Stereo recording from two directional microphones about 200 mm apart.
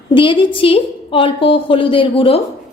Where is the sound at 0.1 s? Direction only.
25° left (ahead or behind).